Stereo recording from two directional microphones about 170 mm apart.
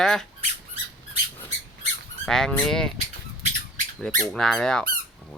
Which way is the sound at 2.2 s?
5° left (ahead or behind).